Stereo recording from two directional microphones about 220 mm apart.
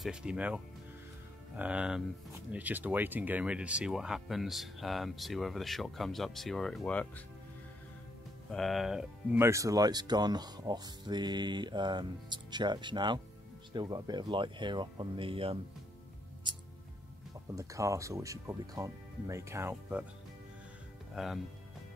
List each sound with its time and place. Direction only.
0.0 s speech: 5° right (ahead or behind)
1.6 s speech: 5° right (ahead or behind)
8.5 s speech: centre (ahead or behind); by 15.6 s 25° right (ahead or behind)
16.5 s music: 20° right (ahead or behind)
17.6 s speech: 15° right (ahead or behind)
21.1 s speech: centre (ahead or behind)